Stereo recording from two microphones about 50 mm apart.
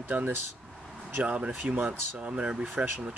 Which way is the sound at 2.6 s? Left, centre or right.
Right.